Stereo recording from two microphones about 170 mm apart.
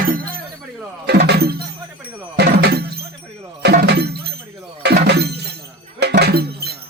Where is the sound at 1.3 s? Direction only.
70° right (ahead or behind).